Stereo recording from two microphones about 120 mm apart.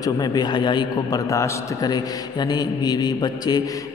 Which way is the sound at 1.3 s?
25° left (ahead or behind).